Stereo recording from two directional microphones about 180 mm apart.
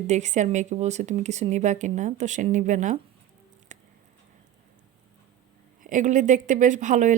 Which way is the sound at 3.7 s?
40° right (ahead or behind).